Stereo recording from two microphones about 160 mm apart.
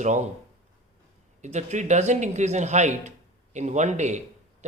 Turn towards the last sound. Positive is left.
turn(degrees=-45)  # may be behind; listen again after turning